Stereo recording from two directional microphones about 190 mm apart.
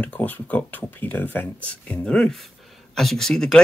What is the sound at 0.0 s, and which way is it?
Speech, 10° left (ahead or behind).